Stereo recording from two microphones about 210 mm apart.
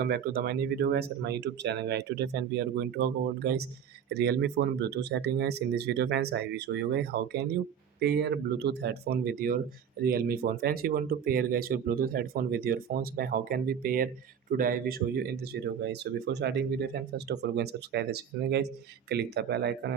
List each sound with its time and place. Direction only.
0.0 s speech: 45° right (ahead or behind)